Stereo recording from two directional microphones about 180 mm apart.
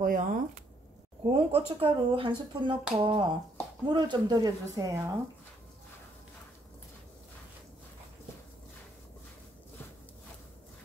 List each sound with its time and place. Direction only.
0.0 s speech: 50° right (ahead or behind)
1.3 s speech: 30° right (ahead or behind)